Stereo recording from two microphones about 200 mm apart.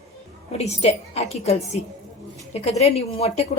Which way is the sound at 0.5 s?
30° left (ahead or behind).